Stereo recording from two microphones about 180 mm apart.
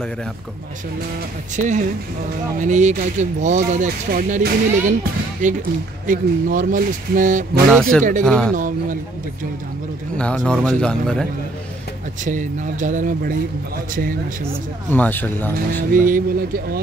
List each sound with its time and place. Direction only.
1.6 s speech: 45° right (ahead or behind)
8.3 s a man's voice: 5° left (ahead or behind)
8.5 s speech: 45° right (ahead or behind)
10.1 s a man's voice: 5° left (ahead or behind)
12.3 s speech: 45° right (ahead or behind)
14.9 s speech: 10° left (ahead or behind)
15.9 s speech: 50° right (ahead or behind)